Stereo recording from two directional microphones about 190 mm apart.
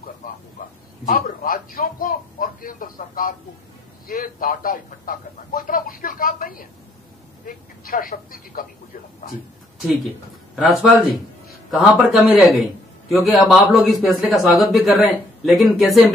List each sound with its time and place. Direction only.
1.0 s speech: 50° left (ahead or behind)
9.8 s a man's voice: centre (ahead or behind)
12.1 s a man's voice: centre (ahead or behind)